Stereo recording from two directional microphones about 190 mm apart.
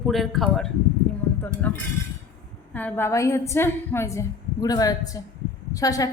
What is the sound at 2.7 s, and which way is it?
A woman's voice, 10° left (ahead or behind).